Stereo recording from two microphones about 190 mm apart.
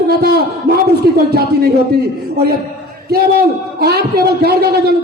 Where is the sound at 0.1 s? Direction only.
55° right (ahead or behind).